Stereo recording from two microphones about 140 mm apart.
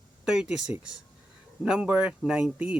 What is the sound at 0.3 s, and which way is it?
Speech, 5° right (ahead or behind).